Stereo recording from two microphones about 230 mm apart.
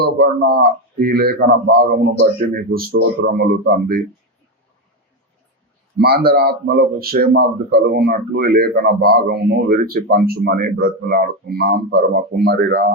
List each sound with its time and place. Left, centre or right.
0.0 s a man's voice: right
6.0 s a man's voice: right